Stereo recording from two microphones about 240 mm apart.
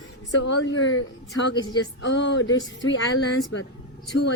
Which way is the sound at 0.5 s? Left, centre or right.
Left.